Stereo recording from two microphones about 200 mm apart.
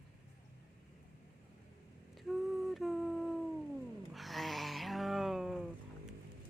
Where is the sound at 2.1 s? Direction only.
Centre (ahead or behind).